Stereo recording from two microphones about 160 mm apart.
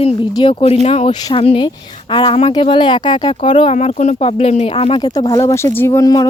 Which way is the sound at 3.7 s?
45° left (ahead or behind).